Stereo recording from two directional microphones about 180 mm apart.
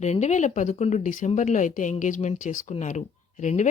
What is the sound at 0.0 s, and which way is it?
Speech, 40° left (ahead or behind).